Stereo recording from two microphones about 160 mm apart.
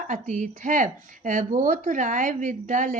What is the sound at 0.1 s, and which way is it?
A woman's voice, 50° right (ahead or behind).